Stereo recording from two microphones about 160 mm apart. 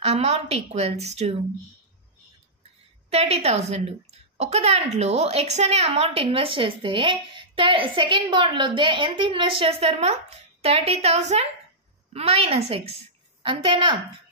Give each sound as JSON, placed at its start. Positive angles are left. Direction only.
{"t": 0.0, "sound": "a woman's voice", "side_deg": -40}
{"t": 3.1, "sound": "a woman's voice", "side_deg": -40}